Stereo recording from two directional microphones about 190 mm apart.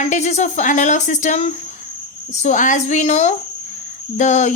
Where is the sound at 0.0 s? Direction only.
40° left (ahead or behind).